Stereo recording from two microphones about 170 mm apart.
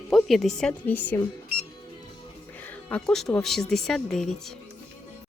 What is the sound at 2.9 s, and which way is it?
Speech, 5° left (ahead or behind).